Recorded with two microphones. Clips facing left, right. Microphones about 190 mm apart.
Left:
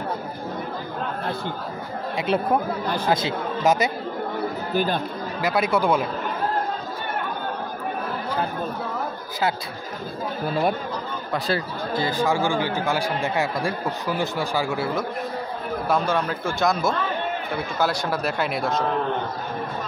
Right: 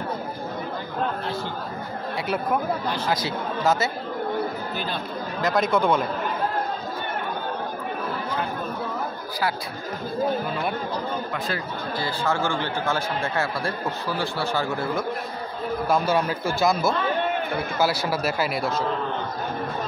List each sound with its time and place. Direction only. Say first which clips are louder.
2.1 s speech: left 3 dB; 25° left (ahead or behind)
4.7 s speech: left 7 dB; 50° left (ahead or behind)
5.4 s speech: even; 10° left (ahead or behind)
11.3 s speech: left 4 dB; 35° left (ahead or behind)
12.0 s speech: left 3 dB; 15° left (ahead or behind)
15.9 s speech: even; 5° right (ahead or behind)